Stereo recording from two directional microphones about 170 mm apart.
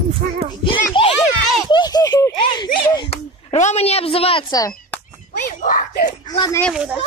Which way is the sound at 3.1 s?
40° left (ahead or behind).